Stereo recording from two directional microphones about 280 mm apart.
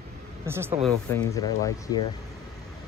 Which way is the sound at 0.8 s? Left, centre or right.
Centre.